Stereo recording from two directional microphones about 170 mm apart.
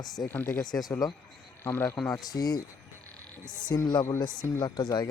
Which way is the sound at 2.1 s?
20° left (ahead or behind).